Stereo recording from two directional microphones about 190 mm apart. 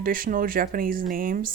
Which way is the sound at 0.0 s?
45° right (ahead or behind).